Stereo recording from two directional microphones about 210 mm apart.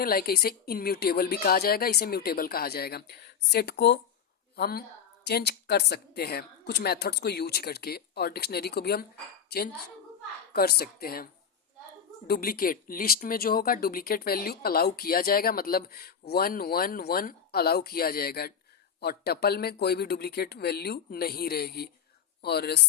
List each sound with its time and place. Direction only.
0.0 s a woman's voice: 45° left (ahead or behind)
10.5 s speech: 45° left (ahead or behind)
12.3 s speech: 45° left (ahead or behind)